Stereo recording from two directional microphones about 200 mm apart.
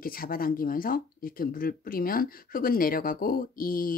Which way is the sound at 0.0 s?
45° left (ahead or behind).